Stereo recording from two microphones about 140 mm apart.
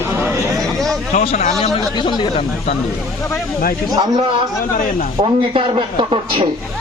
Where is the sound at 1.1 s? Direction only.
70° left (ahead or behind).